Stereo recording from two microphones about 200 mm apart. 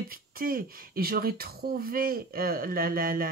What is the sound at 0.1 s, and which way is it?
Speech, 45° right (ahead or behind).